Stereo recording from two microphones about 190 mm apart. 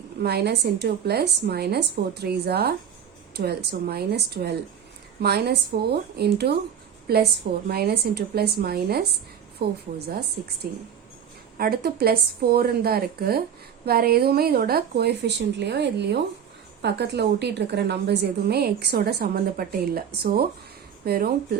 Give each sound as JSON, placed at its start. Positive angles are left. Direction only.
{"t": 0.2, "sound": "a woman's voice", "side_deg": -55}